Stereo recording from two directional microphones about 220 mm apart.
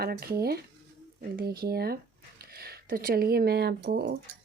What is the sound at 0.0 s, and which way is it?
Speech, 45° right (ahead or behind).